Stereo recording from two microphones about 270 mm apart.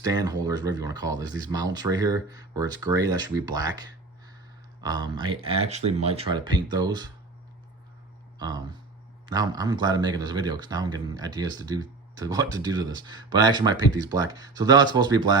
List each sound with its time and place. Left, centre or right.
0.0 s speech: centre
8.4 s speech: centre